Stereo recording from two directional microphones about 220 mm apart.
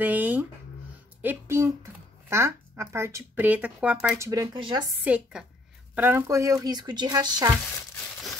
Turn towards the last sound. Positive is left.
turn(degrees=-20)  # may be behind; listen again after turning